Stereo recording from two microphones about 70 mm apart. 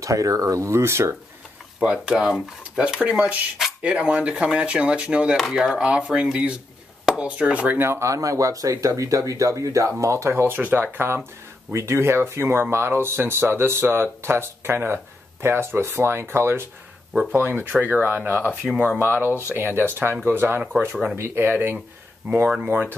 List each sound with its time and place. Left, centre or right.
0.0 s speech: right
1.8 s speech: centre
7.8 s speech: right
10.3 s speech: right
20.9 s speech: centre
21.2 s speech: right